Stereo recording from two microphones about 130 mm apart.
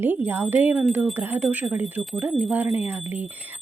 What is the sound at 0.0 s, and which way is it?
Speech, 15° right (ahead or behind).